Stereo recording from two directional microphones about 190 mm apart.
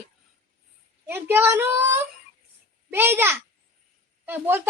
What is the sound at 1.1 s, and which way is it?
Speech, 10° right (ahead or behind).